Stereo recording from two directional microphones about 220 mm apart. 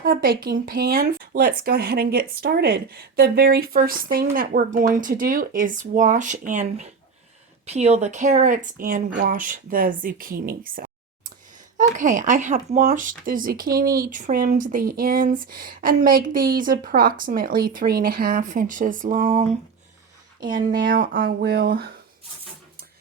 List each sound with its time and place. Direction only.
0.0 s speech: 45° right (ahead or behind)